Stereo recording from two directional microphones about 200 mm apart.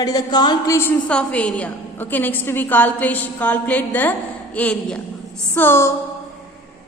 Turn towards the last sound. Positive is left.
turn(degrees=10)  # may be behind; listen again after turning